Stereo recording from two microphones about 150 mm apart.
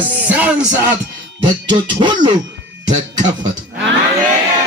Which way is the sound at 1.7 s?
30° right (ahead or behind).